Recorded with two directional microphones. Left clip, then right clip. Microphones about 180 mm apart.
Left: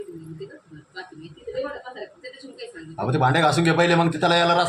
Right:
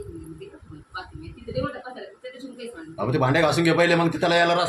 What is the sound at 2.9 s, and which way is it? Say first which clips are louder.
A man's voice: left 1 dB; 10° left (ahead or behind).